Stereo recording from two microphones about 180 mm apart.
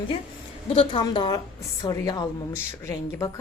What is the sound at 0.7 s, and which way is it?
A woman's voice, 30° left (ahead or behind).